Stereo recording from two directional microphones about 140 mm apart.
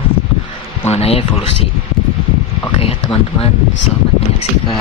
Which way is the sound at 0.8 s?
45° left (ahead or behind).